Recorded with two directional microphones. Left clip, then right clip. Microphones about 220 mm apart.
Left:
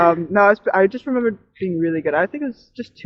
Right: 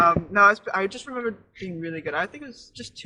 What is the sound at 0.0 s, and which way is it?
Speech, 35° left (ahead or behind).